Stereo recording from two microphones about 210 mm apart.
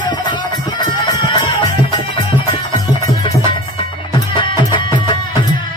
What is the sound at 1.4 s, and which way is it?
Music, 20° left (ahead or behind).